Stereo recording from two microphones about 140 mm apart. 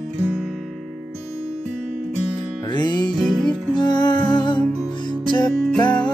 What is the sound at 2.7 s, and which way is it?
Music, 35° left (ahead or behind).